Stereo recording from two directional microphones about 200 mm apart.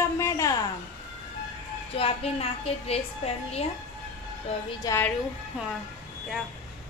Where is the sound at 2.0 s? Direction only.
30° left (ahead or behind).